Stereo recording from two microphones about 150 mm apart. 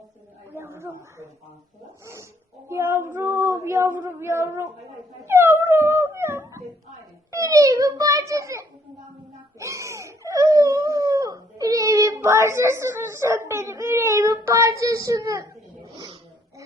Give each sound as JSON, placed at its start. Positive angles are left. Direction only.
{"t": 0.5, "sound": "a sound", "side_deg": -15}
{"t": 2.6, "sound": "female singing", "side_deg": -15}
{"t": 7.3, "sound": "a child's voice", "side_deg": -20}